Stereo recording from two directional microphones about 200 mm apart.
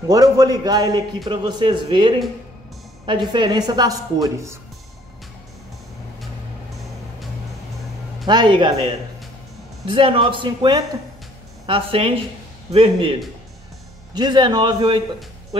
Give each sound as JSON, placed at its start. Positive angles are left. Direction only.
{"t": 0.1, "sound": "a man's voice", "side_deg": -20}
{"t": 8.3, "sound": "a man's voice", "side_deg": -20}